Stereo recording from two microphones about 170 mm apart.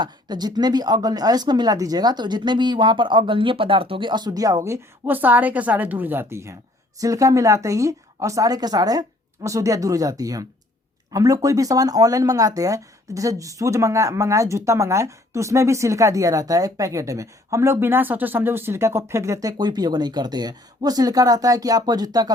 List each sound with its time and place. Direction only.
0.0 s speech: 25° right (ahead or behind)